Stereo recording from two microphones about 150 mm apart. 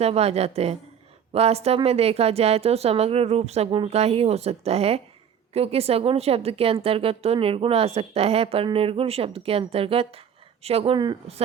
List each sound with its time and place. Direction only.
0.0 s a woman's voice: 45° right (ahead or behind)
10.9 s speech: 30° right (ahead or behind)